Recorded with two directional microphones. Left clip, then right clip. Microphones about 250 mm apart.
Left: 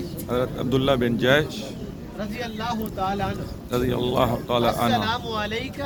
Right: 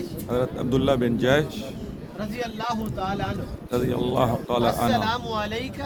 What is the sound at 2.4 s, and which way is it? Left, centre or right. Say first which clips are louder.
Speech: right 1 dB; right.